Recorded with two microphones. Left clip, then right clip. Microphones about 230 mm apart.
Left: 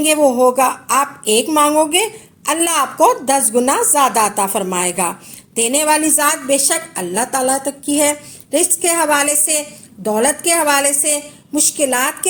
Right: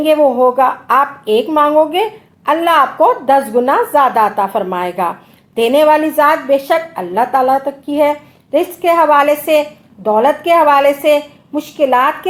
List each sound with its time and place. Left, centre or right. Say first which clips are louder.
0.0 s a woman's voice: right 2 dB; left